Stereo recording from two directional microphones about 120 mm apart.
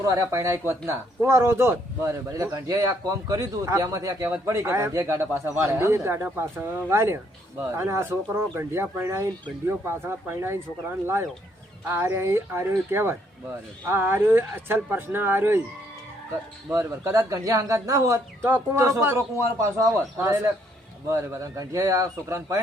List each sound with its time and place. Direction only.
0.0 s speech: 25° right (ahead or behind)
16.7 s speech: 25° right (ahead or behind)